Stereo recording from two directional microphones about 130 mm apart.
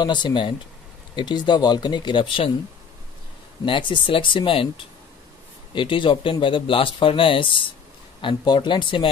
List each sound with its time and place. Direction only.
0.0 s speech: 35° left (ahead or behind)
3.6 s speech: 40° left (ahead or behind)